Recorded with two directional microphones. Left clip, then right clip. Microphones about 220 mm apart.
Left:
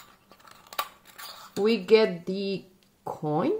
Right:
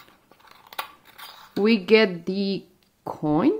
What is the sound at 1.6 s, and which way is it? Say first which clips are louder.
Speech: right 3 dB; 35° right (ahead or behind).